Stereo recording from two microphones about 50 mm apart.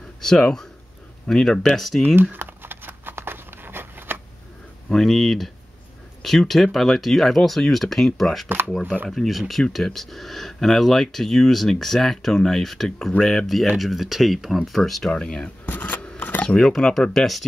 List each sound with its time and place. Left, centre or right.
0.2 s speech: centre
1.8 s speech: centre
2.3 s a sound: right
4.8 s speech: centre
15.1 s speech: centre
15.6 s a sound: left
16.4 s speech: centre